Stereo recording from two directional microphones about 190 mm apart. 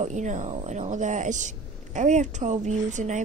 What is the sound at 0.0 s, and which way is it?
A woman's voice, 40° right (ahead or behind).